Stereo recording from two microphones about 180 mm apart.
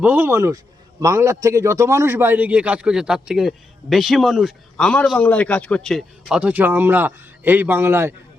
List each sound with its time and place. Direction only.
0.0 s a man's voice: 10° right (ahead or behind)